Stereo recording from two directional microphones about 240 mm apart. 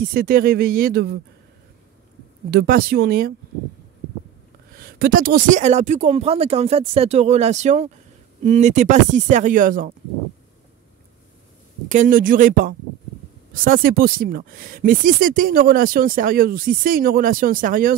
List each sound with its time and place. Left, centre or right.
0.0 s speech: right
2.5 s speech: right
4.7 s speech: right
11.9 s speech: right